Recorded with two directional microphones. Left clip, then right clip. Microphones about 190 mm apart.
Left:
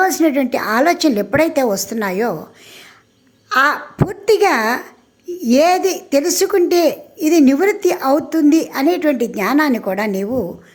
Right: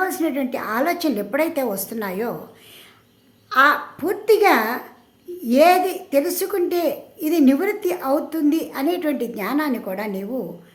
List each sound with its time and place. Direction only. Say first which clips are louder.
0.0 s speech: left 8 dB; 30° left (ahead or behind)
3.5 s speech: left 1 dB; 35° left (ahead or behind)